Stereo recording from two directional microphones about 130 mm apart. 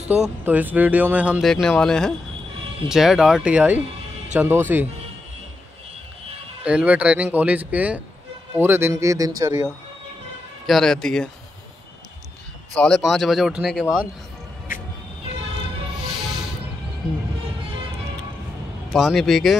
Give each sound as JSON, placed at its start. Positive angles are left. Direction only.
{"t": 0.2, "sound": "speech", "side_deg": -10}
{"t": 1.4, "sound": "speech", "side_deg": 5}
{"t": 6.6, "sound": "a man's voice", "side_deg": -10}
{"t": 10.7, "sound": "speech", "side_deg": 5}
{"t": 12.7, "sound": "speech", "side_deg": 5}
{"t": 16.1, "sound": "music", "side_deg": -5}
{"t": 18.9, "sound": "speech", "side_deg": 0}